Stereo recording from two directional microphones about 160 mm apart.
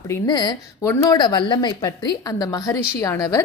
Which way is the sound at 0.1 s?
25° left (ahead or behind).